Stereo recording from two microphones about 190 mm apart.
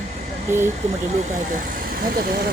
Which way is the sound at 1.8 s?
50° right (ahead or behind).